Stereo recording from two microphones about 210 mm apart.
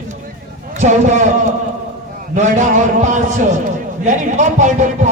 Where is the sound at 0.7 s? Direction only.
35° right (ahead or behind).